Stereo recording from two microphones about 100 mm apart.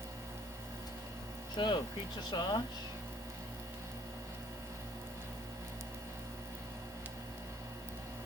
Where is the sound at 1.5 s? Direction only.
50° left (ahead or behind).